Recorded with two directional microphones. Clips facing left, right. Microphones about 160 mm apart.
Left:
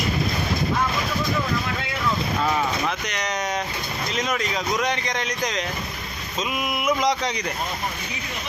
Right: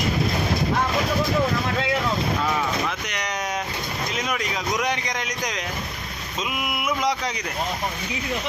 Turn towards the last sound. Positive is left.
turn(degrees=-5)  # may be behind; listen again after turning